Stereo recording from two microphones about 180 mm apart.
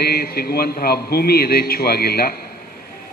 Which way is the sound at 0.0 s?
60° left (ahead or behind).